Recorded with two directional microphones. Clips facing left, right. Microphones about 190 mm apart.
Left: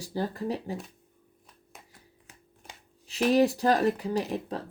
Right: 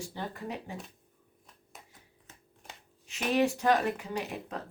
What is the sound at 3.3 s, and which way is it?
Speech, 35° left (ahead or behind).